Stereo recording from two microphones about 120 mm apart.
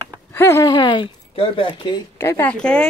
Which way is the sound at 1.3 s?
50° left (ahead or behind).